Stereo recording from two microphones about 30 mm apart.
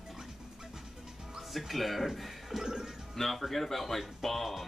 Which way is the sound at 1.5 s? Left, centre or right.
Centre.